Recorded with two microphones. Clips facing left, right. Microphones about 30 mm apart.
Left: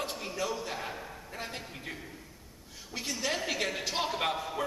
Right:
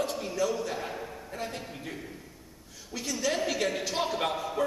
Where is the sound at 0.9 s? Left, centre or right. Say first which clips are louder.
Right 4 dB; centre.